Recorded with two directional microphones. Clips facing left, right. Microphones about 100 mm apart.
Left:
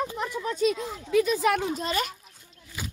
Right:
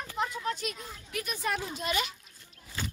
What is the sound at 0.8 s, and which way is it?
Speech, 90° left.